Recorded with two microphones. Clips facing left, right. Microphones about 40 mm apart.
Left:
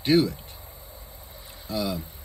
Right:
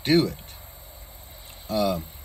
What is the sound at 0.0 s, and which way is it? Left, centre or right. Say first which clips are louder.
Speech: even; right.